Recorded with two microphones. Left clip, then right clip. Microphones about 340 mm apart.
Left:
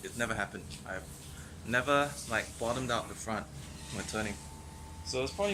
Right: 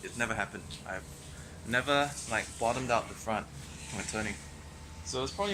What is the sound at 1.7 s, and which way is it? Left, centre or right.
Speech, centre.